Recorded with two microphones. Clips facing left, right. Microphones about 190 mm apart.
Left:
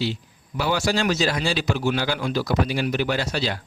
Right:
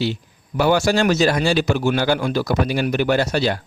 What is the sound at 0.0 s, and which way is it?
A man's voice, 55° right (ahead or behind).